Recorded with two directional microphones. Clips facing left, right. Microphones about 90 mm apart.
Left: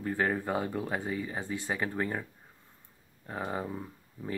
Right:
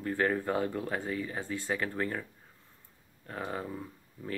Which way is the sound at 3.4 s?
15° left (ahead or behind).